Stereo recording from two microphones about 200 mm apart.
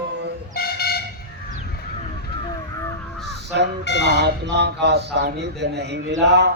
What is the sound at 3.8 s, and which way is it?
Speech, 60° left (ahead or behind).